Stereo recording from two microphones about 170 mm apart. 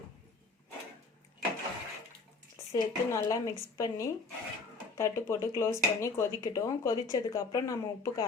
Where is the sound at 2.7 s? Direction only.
20° left (ahead or behind).